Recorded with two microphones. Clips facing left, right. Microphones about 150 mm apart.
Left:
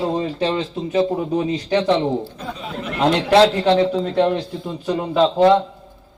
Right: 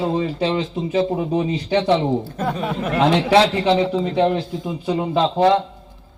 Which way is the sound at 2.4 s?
70° right (ahead or behind).